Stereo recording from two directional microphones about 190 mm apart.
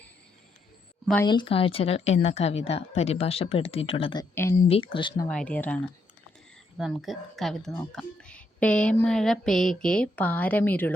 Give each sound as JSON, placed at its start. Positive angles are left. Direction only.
{"t": 1.2, "sound": "speech", "side_deg": 25}
{"t": 5.3, "sound": "speech", "side_deg": 5}